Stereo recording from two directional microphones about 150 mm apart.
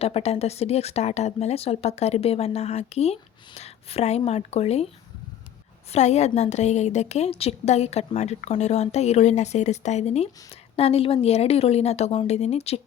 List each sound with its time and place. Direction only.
0.0 s a woman's voice: 45° left (ahead or behind)
5.9 s a woman's voice: 50° left (ahead or behind)